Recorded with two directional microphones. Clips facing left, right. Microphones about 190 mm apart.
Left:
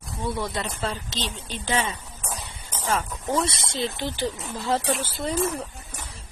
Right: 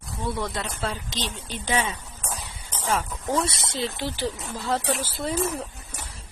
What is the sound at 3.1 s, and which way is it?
Speech, 5° left (ahead or behind).